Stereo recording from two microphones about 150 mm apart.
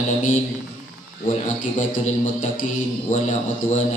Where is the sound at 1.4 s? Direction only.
55° left (ahead or behind).